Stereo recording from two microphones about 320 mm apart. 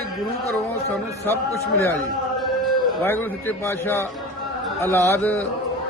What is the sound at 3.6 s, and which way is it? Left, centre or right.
Speech, centre.